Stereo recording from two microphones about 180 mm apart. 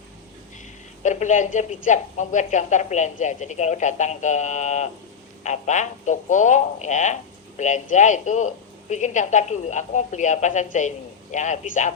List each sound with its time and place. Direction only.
1.0 s speech: 45° left (ahead or behind)